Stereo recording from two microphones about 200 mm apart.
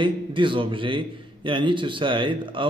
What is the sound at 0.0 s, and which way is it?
A man's voice, 25° right (ahead or behind).